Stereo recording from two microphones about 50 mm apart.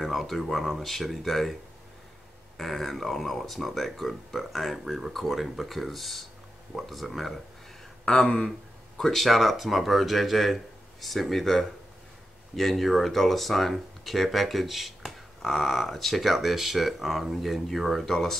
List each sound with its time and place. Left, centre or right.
0.0 s speech: centre
8.0 s a sound: centre
8.5 s speech: centre